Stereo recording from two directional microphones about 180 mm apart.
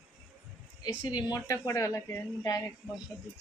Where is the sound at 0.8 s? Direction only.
25° left (ahead or behind).